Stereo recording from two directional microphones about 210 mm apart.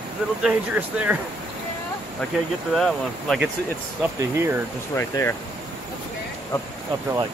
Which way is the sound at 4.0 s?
10° right (ahead or behind).